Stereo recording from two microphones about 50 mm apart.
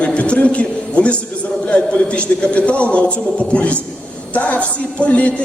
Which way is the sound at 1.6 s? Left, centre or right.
Left.